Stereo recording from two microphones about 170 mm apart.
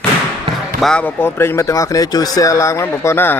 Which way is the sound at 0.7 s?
5° left (ahead or behind).